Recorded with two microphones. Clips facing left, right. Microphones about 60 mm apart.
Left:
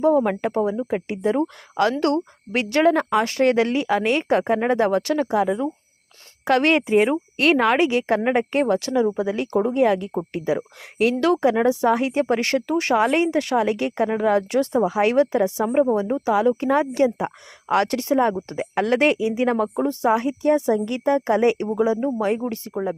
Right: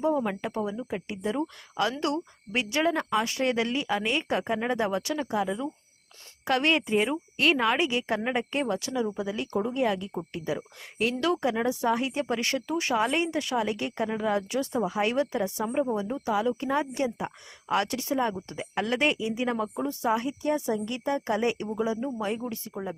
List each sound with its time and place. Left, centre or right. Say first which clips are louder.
0.0 s speech: left 8 dB; left
1.0 s a woman's voice: left 8 dB; left
4.4 s a woman's voice: left 8 dB; left
6.4 s a woman's voice: left 7 dB; left
11.2 s a woman's voice: left 8 dB; left
14.1 s a woman's voice: left 8 dB; left
15.7 s speech: left 9 dB; left
16.2 s a woman's voice: left 7 dB; left
17.7 s a woman's voice: left 7 dB; left
18.5 s a woman's voice: left 8 dB; left